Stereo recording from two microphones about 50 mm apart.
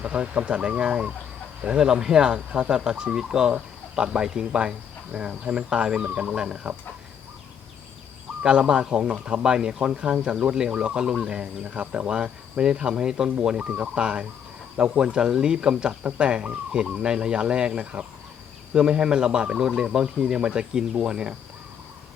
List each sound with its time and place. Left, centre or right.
0.0 s speech: right
8.4 s speech: centre